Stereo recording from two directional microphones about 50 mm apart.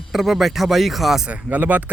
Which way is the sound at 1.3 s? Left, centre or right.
Right.